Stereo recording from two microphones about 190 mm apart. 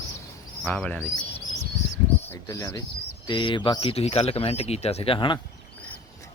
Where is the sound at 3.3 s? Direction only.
25° left (ahead or behind).